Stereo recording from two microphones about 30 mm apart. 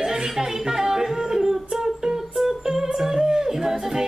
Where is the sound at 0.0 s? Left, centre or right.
Centre.